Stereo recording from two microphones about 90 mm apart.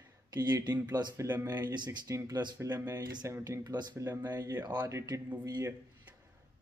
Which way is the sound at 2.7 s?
35° right (ahead or behind).